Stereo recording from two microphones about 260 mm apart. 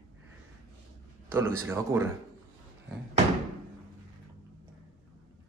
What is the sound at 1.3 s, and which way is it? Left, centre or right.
Speech, centre.